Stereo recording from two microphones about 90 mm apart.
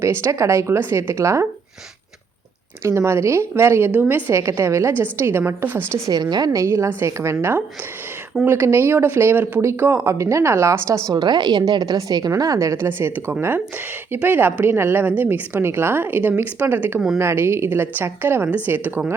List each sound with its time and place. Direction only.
0.0 s a woman's voice: 30° right (ahead or behind)
2.8 s a woman's voice: 30° right (ahead or behind)
6.1 s a woman's voice: 50° right (ahead or behind)
6.6 s a woman's voice: 30° right (ahead or behind)
9.6 s a woman's voice: 30° right (ahead or behind)
11.1 s a woman's voice: 50° right (ahead or behind); by 19.1 s 20° right (ahead or behind)